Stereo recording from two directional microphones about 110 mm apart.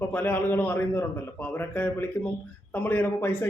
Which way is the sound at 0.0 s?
20° left (ahead or behind).